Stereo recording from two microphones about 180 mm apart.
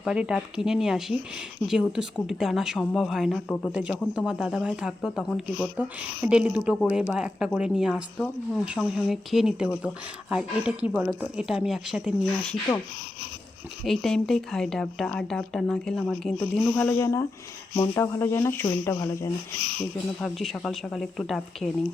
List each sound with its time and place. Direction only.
0.0 s speech: 5° right (ahead or behind)
13.8 s speech: centre (ahead or behind)
20.2 s speech: centre (ahead or behind)